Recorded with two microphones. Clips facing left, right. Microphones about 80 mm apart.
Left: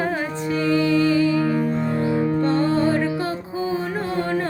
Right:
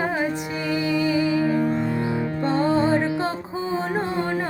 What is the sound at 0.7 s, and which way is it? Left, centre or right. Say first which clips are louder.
Music: left 4 dB; centre.